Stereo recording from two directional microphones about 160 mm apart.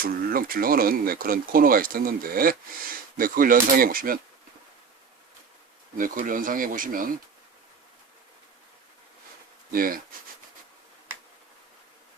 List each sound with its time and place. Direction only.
0.0 s speech: 65° right (ahead or behind)
6.0 s speech: 60° right (ahead or behind)
9.7 s speech: 65° right (ahead or behind)